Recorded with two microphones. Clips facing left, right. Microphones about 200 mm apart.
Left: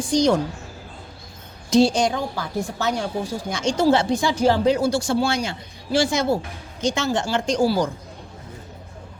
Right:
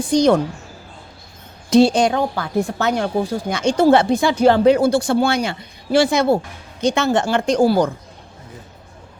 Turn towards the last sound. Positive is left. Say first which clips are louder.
# right 5 dB
turn(degrees=-55)  # may be behind; listen again after turning